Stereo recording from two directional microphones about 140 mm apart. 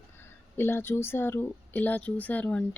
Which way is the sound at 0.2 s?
15° left (ahead or behind).